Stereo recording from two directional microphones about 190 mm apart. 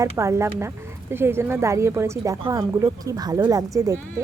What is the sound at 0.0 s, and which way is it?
A woman's voice, 15° right (ahead or behind).